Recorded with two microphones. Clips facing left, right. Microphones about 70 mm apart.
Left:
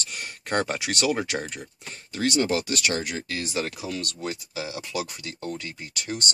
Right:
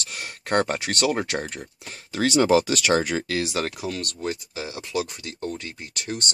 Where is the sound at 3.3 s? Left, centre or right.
Right.